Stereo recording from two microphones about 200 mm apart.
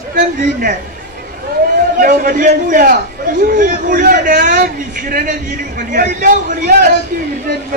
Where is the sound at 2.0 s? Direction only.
45° right (ahead or behind).